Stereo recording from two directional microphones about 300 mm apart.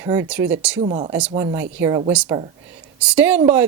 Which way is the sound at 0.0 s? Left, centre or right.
Centre.